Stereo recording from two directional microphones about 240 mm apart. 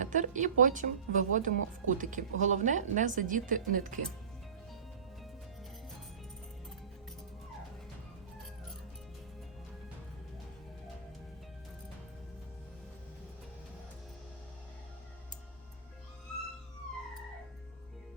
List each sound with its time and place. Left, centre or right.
0.0 s speech: right